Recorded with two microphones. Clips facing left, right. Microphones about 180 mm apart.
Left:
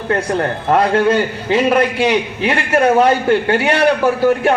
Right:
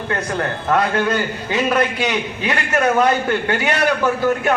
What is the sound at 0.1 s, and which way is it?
A man's voice, 30° left (ahead or behind).